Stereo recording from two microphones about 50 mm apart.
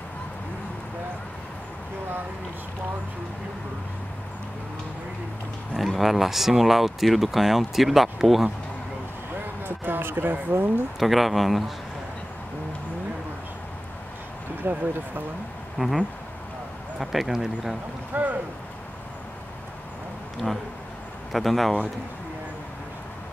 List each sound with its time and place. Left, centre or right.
5.8 s speech: centre
9.7 s a sound: right
11.0 s speech: centre
14.6 s speech: right
15.8 s speech: centre
18.1 s speech: right
21.3 s speech: centre